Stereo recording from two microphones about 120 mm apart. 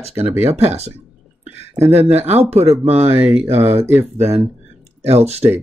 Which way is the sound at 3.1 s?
15° right (ahead or behind).